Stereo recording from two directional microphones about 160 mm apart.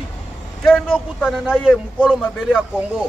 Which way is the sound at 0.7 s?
5° left (ahead or behind).